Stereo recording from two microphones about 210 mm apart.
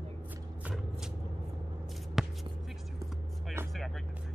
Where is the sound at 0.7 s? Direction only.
5° right (ahead or behind).